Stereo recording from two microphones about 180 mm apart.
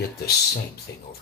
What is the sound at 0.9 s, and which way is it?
Music, 70° left (ahead or behind).